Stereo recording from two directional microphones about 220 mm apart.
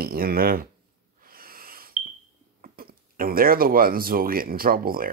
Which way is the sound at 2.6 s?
40° right (ahead or behind).